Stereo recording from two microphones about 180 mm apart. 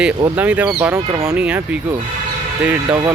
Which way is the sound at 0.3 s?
10° right (ahead or behind).